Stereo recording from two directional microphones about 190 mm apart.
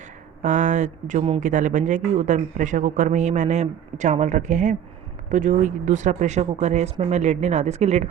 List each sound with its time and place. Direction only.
0.4 s speech: 40° right (ahead or behind)